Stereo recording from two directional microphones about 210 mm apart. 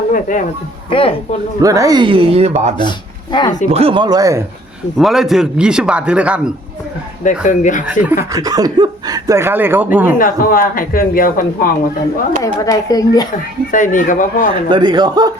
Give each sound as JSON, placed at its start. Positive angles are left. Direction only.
{"t": 0.1, "sound": "speech", "side_deg": 40}
{"t": 0.9, "sound": "speech", "side_deg": 25}
{"t": 1.6, "sound": "speech", "side_deg": -15}
{"t": 3.3, "sound": "speech", "side_deg": 20}
{"t": 3.7, "sound": "speech", "side_deg": -25}
{"t": 4.9, "sound": "a man's voice", "side_deg": 0}
{"t": 7.3, "sound": "speech", "side_deg": 35}
{"t": 8.3, "sound": "speech", "side_deg": -15}
{"t": 10.2, "sound": "speech", "side_deg": 40}
{"t": 12.4, "sound": "speech", "side_deg": 15}
{"t": 13.7, "sound": "speech", "side_deg": 40}
{"t": 14.7, "sound": "speech", "side_deg": -20}